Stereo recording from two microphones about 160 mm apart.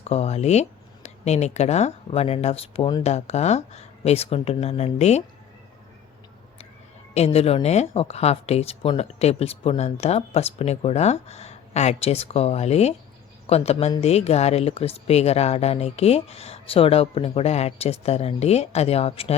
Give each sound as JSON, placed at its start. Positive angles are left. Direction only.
{"t": 0.0, "sound": "speech", "side_deg": 40}
{"t": 7.1, "sound": "speech", "side_deg": 40}